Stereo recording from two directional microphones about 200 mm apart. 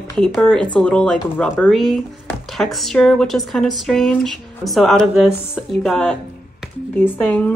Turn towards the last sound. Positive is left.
turn(degrees=10)  # may be behind; listen again after turning